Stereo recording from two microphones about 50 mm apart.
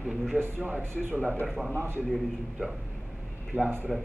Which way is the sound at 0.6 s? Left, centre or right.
Right.